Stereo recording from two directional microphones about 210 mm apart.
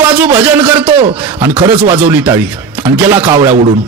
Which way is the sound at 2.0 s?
10° right (ahead or behind).